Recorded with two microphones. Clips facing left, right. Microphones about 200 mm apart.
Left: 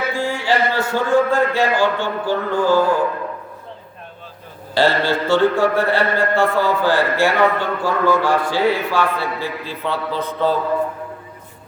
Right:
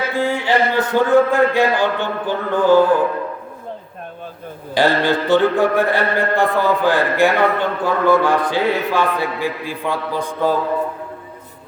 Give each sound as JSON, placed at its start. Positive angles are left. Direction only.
{"t": 0.1, "sound": "mantra", "side_deg": -20}
{"t": 4.7, "sound": "mantra", "side_deg": -15}